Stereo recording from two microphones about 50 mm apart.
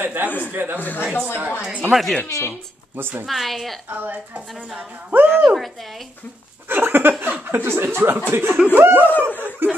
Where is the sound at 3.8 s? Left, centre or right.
Right.